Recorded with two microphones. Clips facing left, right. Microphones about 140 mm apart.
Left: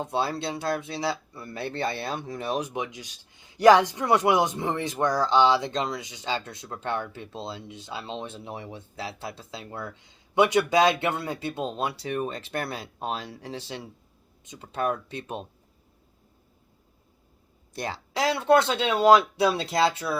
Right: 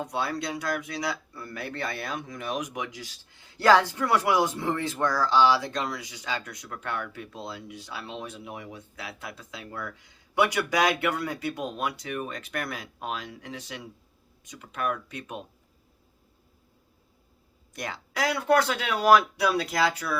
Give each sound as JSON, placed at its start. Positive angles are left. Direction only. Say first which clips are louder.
{"t": 0.0, "sound": "speech", "louder": "left 2 dB", "side_deg": 25}
{"t": 17.7, "sound": "speech", "louder": "left 2 dB", "side_deg": 30}